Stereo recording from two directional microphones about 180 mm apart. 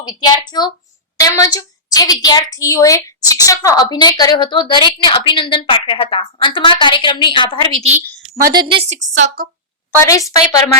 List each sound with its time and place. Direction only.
0.0 s a woman's voice: 25° left (ahead or behind)
8.5 s a woman's voice: 30° right (ahead or behind)
9.0 s a woman's voice: 50° right (ahead or behind)
9.9 s a woman's voice: 20° left (ahead or behind)